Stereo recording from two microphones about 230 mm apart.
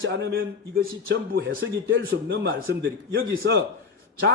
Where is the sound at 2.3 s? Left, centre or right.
Right.